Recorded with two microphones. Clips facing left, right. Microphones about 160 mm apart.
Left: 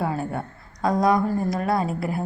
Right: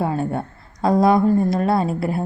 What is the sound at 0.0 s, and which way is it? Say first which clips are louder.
A woman's voice: right 4 dB; 25° right (ahead or behind).